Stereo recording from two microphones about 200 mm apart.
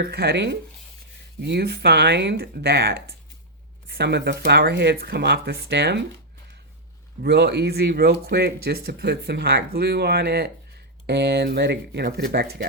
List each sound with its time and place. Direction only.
0.0 s speech: 55° right (ahead or behind)
7.2 s speech: 55° right (ahead or behind)